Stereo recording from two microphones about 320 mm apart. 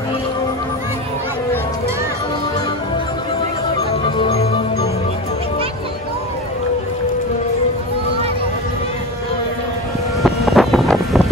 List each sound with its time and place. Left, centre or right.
4.0 s music: centre
10.2 s vehicle: centre